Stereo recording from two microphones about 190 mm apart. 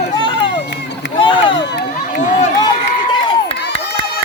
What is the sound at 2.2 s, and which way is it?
Run, 40° left (ahead or behind).